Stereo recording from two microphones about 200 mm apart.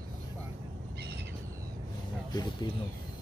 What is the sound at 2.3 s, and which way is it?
Speech, 20° left (ahead or behind).